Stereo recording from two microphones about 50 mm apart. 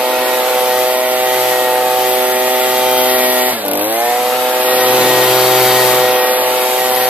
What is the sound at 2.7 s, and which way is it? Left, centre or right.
Vehicle, right.